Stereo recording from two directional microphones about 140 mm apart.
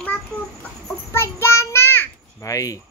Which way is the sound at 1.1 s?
20° left (ahead or behind).